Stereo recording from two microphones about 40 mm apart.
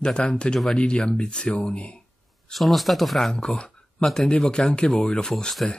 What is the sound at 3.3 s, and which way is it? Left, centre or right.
Speech, centre.